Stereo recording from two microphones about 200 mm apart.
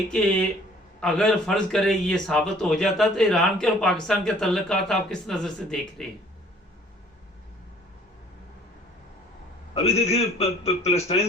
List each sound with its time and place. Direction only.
1.0 s speech: 5° left (ahead or behind)
9.7 s a man's voice: 30° left (ahead or behind)